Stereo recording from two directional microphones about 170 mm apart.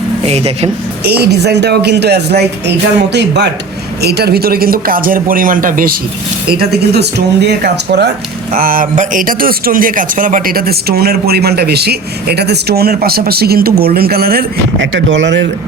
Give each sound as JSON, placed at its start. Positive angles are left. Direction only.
{"t": 0.2, "sound": "speech", "side_deg": -35}
{"t": 1.0, "sound": "a woman's voice", "side_deg": -70}
{"t": 4.0, "sound": "a man's voice", "side_deg": -70}
{"t": 6.5, "sound": "a woman's voice", "side_deg": -65}
{"t": 8.5, "sound": "a man's voice", "side_deg": -55}